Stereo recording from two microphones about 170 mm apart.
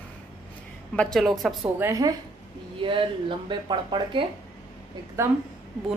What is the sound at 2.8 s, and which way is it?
Speech, 30° right (ahead or behind).